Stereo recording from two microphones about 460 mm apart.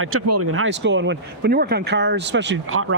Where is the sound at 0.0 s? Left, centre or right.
Right.